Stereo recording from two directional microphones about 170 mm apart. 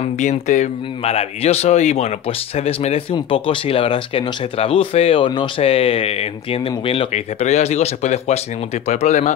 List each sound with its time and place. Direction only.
0.0 s speech: 45° left (ahead or behind)